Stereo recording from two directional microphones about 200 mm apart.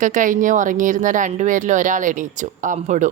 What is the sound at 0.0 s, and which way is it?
Speech, 40° right (ahead or behind).